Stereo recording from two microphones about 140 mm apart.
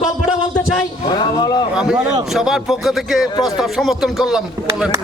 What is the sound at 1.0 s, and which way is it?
Speech, 30° left (ahead or behind).